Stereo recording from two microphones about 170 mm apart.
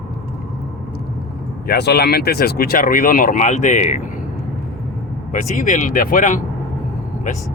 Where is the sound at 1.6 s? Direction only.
70° left (ahead or behind); by 4.0 s 45° left (ahead or behind).